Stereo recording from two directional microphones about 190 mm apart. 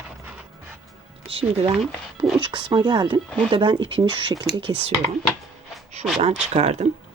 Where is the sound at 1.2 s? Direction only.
30° right (ahead or behind).